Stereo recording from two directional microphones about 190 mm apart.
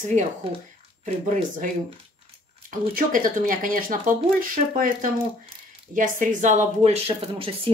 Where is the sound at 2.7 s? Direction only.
45° right (ahead or behind).